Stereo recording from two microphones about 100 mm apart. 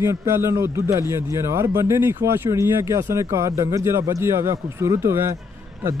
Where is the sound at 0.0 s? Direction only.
30° right (ahead or behind).